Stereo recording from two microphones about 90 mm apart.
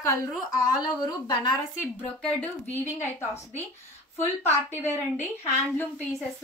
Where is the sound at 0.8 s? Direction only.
50° left (ahead or behind).